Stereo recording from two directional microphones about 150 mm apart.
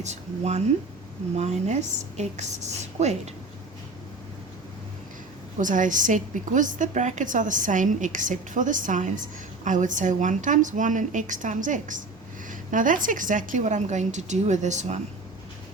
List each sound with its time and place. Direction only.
0.0 s a woman's voice: 50° right (ahead or behind)
5.5 s a woman's voice: 60° right (ahead or behind)